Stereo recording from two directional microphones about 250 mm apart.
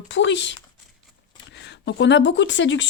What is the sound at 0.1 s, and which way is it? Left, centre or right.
Speech, left.